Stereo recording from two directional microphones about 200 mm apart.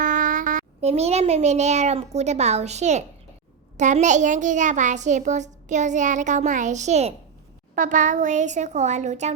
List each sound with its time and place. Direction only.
0.0 s a child's voice: 40° right (ahead or behind)